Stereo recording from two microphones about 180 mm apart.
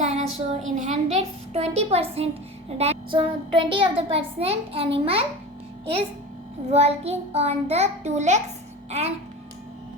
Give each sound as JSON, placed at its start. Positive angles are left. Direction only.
{"t": 0.0, "sound": "child singing", "side_deg": -40}
{"t": 0.8, "sound": "a woman's voice", "side_deg": -40}
{"t": 6.7, "sound": "a child's voice", "side_deg": -35}